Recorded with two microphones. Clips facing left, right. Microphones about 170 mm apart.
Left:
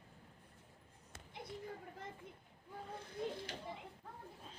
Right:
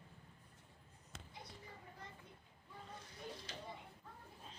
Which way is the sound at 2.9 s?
55° left (ahead or behind).